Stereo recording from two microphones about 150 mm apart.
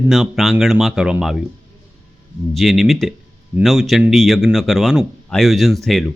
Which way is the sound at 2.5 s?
Centre (ahead or behind).